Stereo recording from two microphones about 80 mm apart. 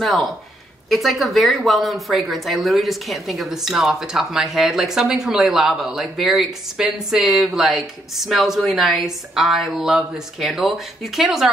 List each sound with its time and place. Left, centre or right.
0.0 s speech: centre